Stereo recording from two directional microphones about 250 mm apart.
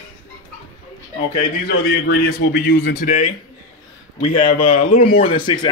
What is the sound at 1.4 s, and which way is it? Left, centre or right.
A man's voice, left.